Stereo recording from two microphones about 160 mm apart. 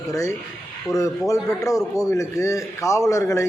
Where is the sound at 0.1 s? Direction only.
20° left (ahead or behind).